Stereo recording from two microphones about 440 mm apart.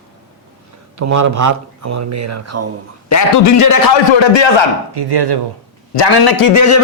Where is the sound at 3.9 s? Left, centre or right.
Left.